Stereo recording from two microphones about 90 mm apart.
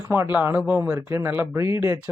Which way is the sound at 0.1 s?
20° right (ahead or behind).